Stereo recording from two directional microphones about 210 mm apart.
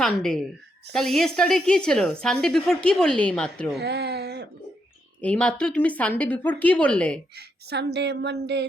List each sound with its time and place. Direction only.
0.0 s speech: 5° left (ahead or behind)
3.8 s a sound: 50° right (ahead or behind)
5.2 s a woman's voice: 5° left (ahead or behind)
7.3 s speech: 50° right (ahead or behind)